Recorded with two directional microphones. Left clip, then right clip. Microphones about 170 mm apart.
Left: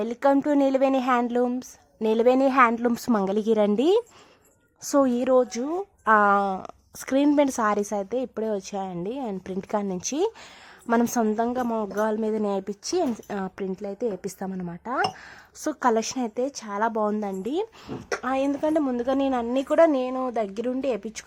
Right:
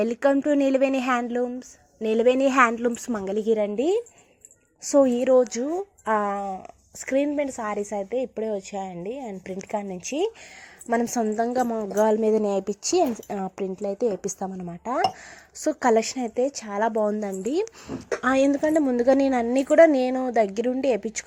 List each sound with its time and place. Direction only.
0.0 s a woman's voice: 10° right (ahead or behind)
2.7 s a woman's voice: centre (ahead or behind)
4.8 s a woman's voice: centre (ahead or behind)
7.3 s a woman's voice: 20° left (ahead or behind); by 17.9 s 5° right (ahead or behind)
18.2 s speech: 25° right (ahead or behind)
18.6 s speech: 10° right (ahead or behind)
20.0 s speech: 20° right (ahead or behind)